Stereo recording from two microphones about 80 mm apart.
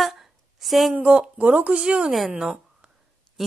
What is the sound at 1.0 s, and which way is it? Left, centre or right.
Speech, centre.